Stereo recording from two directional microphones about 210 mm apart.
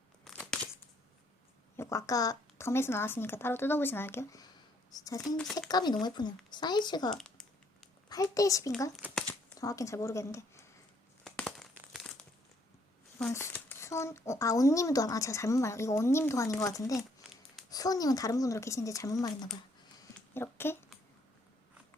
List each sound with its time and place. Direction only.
0.3 s a sound: 5° left (ahead or behind)
1.7 s speech: 15° left (ahead or behind)
7.1 s a sound: centre (ahead or behind)
8.1 s speech: 15° left (ahead or behind)
9.0 s crumpling: 5° right (ahead or behind)
9.6 s speech: 15° left (ahead or behind)
11.2 s crumpling: centre (ahead or behind)
13.2 s speech: 10° left (ahead or behind)
20.1 s a sound: 10° left (ahead or behind)